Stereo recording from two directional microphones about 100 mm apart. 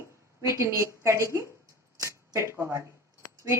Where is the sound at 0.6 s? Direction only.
30° right (ahead or behind).